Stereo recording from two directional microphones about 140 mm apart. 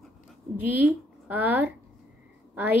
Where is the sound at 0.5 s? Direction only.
15° right (ahead or behind).